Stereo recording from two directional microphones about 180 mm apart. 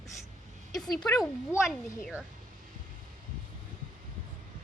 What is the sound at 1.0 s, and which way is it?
Speech, centre (ahead or behind).